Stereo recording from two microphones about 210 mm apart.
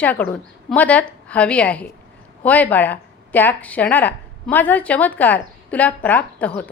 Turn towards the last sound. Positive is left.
turn(degrees=5)  # may be behind; listen again after turning